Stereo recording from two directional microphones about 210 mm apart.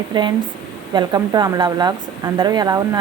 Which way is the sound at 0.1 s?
20° right (ahead or behind).